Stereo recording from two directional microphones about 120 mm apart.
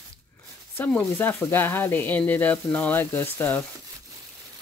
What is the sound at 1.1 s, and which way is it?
Speech, 20° left (ahead or behind).